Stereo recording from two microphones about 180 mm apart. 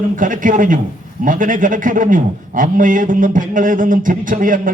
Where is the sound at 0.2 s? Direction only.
45° right (ahead or behind).